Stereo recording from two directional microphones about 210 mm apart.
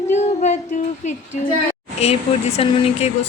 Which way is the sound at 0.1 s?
35° left (ahead or behind).